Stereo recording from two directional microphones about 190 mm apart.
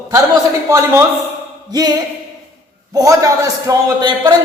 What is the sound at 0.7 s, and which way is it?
A man's voice, 15° right (ahead or behind).